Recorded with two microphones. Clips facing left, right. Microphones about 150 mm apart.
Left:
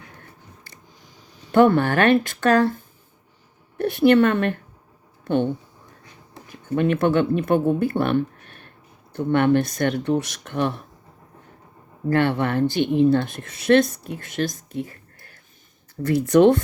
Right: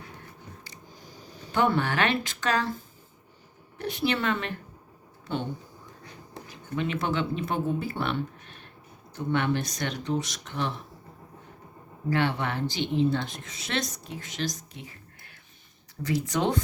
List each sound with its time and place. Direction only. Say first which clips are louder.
1.5 s speech: left 9 dB; 55° left (ahead or behind)
3.8 s a woman's voice: left 12 dB; 55° left (ahead or behind)
6.5 s speech: left 9 dB; 55° left (ahead or behind)
12.0 s speech: left 7 dB; 55° left (ahead or behind)